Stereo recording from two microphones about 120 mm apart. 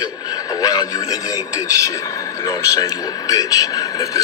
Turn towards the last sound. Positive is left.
turn(degrees=30)  # may be behind; listen again after turning